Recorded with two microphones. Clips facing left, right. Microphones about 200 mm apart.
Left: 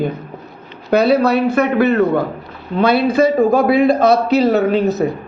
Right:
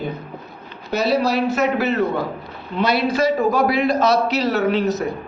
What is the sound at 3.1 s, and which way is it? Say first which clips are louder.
Speech: left 5 dB; 55° left (ahead or behind).